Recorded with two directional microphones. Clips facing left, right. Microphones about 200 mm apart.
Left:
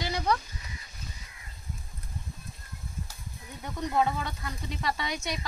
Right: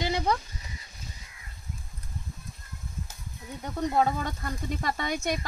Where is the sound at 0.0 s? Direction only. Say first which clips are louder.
Right 2 dB; 25° right (ahead or behind).